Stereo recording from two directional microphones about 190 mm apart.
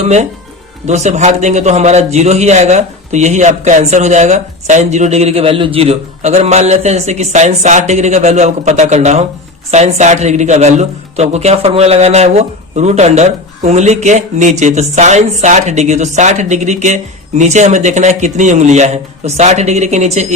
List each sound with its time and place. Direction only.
0.0 s a man's voice: 35° right (ahead or behind)